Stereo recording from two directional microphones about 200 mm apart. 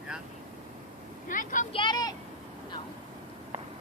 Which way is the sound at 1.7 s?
25° left (ahead or behind).